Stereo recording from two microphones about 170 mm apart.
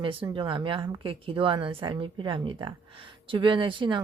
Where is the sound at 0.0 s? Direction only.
30° right (ahead or behind).